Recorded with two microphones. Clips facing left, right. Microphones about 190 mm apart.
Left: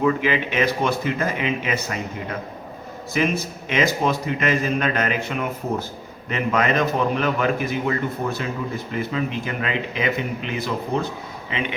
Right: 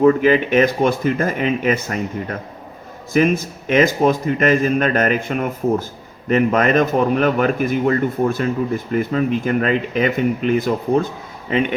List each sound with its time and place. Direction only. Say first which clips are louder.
0.0 s a man's voice: right 7 dB; 45° right (ahead or behind)
3.1 s a man's voice: right 6 dB; 50° right (ahead or behind)